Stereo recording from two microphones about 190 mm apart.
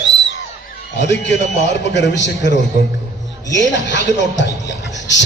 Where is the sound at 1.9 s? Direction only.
70° left (ahead or behind).